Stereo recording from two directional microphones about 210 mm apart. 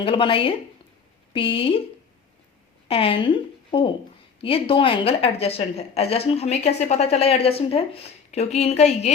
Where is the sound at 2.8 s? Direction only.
25° left (ahead or behind).